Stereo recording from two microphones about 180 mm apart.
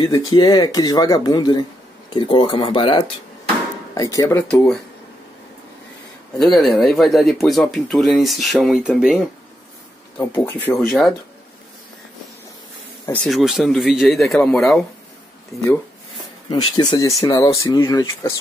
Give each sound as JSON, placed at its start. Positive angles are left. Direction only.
{"t": 0.0, "sound": "speech", "side_deg": 20}
{"t": 6.3, "sound": "speech", "side_deg": 0}
{"t": 10.1, "sound": "speech", "side_deg": 15}
{"t": 10.8, "sound": "speech", "side_deg": 0}
{"t": 13.0, "sound": "speech", "side_deg": 5}
{"t": 16.4, "sound": "speech", "side_deg": 25}